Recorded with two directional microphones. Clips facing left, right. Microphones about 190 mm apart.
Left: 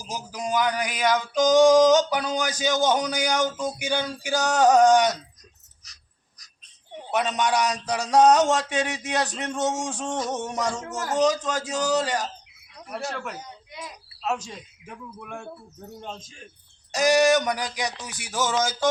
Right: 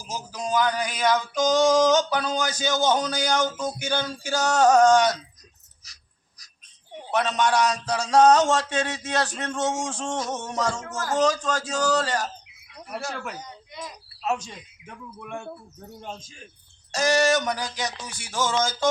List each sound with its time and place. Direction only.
0.1 s male singing: 15° left (ahead or behind)
7.1 s male singing: 15° left (ahead or behind)
14.3 s speech: 5° left (ahead or behind)
16.9 s male singing: 15° left (ahead or behind)